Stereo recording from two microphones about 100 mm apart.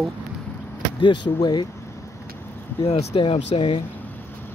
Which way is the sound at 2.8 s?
90° left.